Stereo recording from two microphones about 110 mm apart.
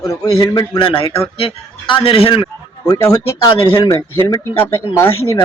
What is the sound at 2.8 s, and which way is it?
A man's voice, 30° left (ahead or behind).